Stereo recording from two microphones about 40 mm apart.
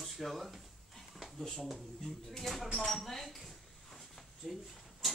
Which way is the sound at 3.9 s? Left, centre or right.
Centre.